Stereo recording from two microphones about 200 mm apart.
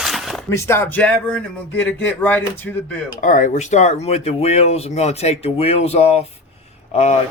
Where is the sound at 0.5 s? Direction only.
15° left (ahead or behind).